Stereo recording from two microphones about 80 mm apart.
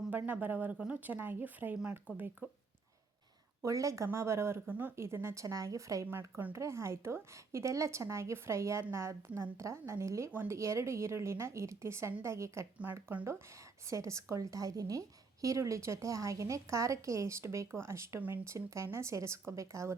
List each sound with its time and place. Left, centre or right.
0.1 s speech: right
3.6 s a woman's voice: right
4.7 s speech: centre
4.9 s a woman's voice: right
6.1 s a woman's voice: right
12.8 s speech: right
13.9 s a woman's voice: right